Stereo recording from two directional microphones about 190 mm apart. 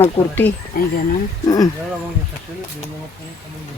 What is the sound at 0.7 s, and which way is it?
Speech, 50° left (ahead or behind).